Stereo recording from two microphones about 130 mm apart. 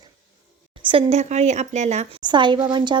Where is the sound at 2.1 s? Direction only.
35° right (ahead or behind).